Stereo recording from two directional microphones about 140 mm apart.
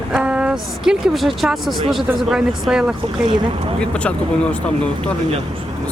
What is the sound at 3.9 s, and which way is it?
Speech, 10° left (ahead or behind).